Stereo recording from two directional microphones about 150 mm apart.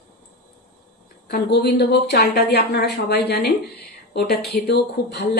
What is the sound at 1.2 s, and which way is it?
A woman's voice, 90° left.